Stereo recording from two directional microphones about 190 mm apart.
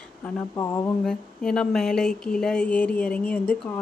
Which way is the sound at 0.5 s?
20° left (ahead or behind).